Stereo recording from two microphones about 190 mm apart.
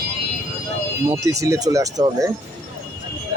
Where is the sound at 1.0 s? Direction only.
15° right (ahead or behind).